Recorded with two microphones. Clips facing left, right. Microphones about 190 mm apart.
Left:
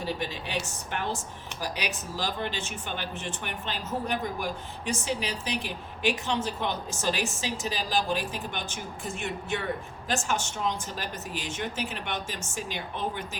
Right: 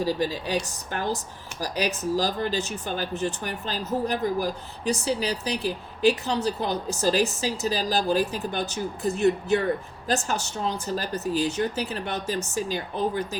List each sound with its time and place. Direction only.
0.0 s speech: 35° right (ahead or behind)